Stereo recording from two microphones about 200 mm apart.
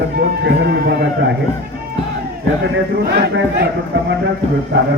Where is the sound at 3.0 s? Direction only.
55° right (ahead or behind).